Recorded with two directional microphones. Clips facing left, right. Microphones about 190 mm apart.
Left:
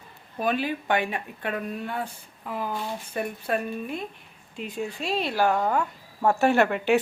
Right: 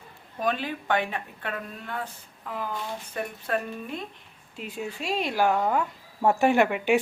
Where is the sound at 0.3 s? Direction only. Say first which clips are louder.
Left 2 dB; 5° left (ahead or behind).